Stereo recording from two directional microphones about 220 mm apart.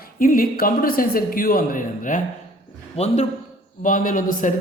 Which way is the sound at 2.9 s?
30° left (ahead or behind).